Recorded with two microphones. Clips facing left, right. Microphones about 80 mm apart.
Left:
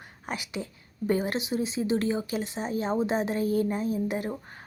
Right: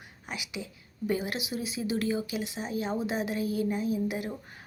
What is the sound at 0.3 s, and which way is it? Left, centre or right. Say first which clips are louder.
A woman's voice: left 4 dB; left.